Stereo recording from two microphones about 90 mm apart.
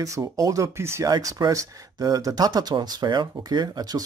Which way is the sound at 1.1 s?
45° right (ahead or behind).